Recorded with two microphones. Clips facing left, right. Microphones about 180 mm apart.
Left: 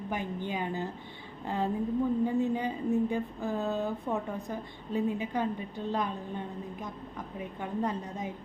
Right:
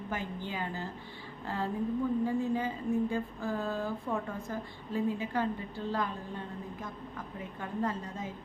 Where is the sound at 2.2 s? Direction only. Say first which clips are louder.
Left 2 dB; 20° left (ahead or behind).